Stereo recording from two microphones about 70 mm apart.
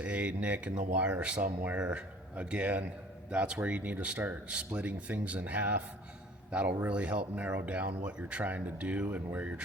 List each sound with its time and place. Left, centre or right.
0.0 s a man's voice: centre